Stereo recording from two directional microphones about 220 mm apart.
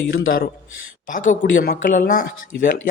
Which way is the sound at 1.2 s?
40° left (ahead or behind).